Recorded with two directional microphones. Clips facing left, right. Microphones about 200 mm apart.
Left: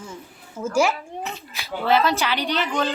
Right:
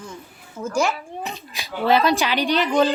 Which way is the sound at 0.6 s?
5° left (ahead or behind).